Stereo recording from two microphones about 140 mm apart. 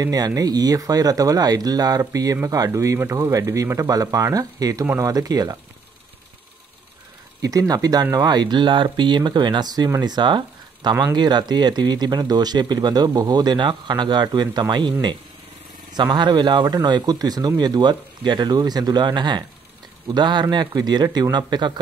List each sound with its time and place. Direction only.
0.0 s speech: 25° right (ahead or behind)
7.4 s speech: 25° right (ahead or behind)